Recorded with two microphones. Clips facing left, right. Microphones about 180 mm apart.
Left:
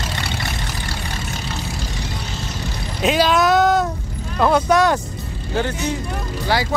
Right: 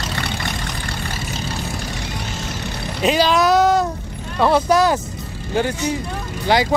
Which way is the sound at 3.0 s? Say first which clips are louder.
Even; centre (ahead or behind).